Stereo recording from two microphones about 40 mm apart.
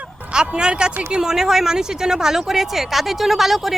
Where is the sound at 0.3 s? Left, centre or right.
Right.